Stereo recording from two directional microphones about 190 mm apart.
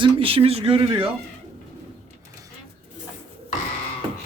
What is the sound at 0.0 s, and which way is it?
Speech, 30° right (ahead or behind).